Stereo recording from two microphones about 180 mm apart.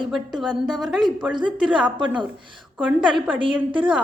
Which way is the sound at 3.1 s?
30° right (ahead or behind).